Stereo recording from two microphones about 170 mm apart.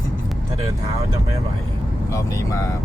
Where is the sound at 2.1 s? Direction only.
20° left (ahead or behind).